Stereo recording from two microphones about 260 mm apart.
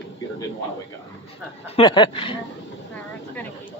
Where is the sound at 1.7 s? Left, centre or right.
Centre.